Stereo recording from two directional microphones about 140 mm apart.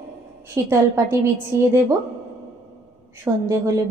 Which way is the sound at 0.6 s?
20° right (ahead or behind).